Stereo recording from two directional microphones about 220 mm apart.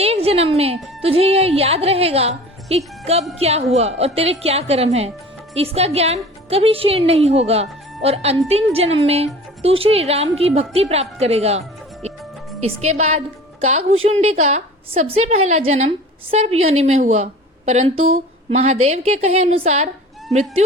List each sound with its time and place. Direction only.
0.0 s a sound: 25° right (ahead or behind)
1.0 s a woman's voice: 25° right (ahead or behind)
13.0 s a woman's voice: 30° right (ahead or behind)